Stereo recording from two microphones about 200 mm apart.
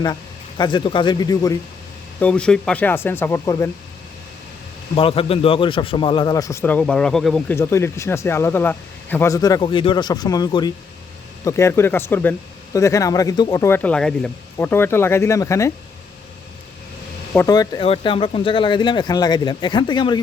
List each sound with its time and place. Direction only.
0.0 s speech: 20° left (ahead or behind)
2.2 s a man's voice: 5° left (ahead or behind)
4.9 s a man's voice: 30° left (ahead or behind)
17.3 s speech: 15° left (ahead or behind)